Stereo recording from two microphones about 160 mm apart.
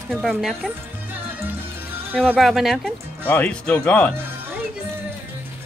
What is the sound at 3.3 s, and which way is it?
Speech, 10° left (ahead or behind).